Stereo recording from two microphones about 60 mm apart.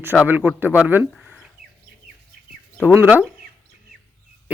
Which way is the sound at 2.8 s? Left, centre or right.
Right.